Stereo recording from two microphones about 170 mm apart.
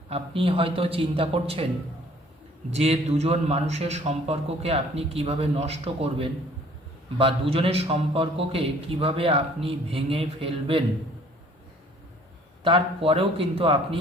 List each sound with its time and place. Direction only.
0.1 s a man's voice: 35° right (ahead or behind)
2.6 s a man's voice: 40° right (ahead or behind)
12.6 s a man's voice: 35° right (ahead or behind)